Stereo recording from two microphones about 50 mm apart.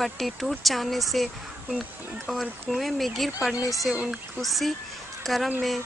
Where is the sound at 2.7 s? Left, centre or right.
Centre.